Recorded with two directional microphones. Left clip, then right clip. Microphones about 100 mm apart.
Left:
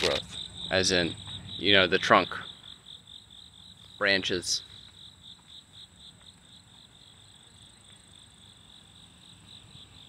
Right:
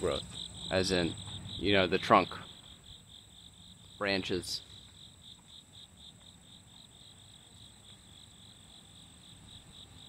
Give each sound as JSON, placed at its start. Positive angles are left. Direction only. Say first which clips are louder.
{"t": 0.0, "sound": "cricket", "louder": "left 6 dB", "side_deg": 0}
{"t": 1.6, "sound": "speech", "louder": "left 6 dB", "side_deg": -5}
{"t": 4.0, "sound": "speech", "louder": "left 7 dB", "side_deg": -10}